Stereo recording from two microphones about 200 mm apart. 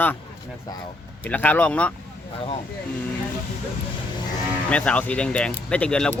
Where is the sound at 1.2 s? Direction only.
10° left (ahead or behind).